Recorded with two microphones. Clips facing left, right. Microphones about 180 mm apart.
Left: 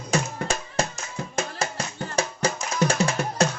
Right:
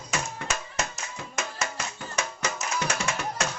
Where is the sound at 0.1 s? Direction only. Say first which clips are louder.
Left 6 dB; 35° left (ahead or behind).